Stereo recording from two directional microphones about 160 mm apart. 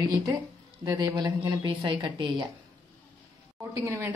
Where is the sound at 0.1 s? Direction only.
25° right (ahead or behind).